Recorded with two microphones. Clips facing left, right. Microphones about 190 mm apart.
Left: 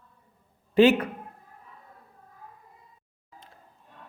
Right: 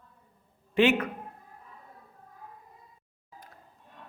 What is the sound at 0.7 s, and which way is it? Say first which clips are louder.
Speech: left 5 dB; 35° left (ahead or behind).